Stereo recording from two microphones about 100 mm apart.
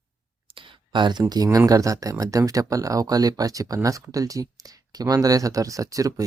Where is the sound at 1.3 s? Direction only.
40° right (ahead or behind).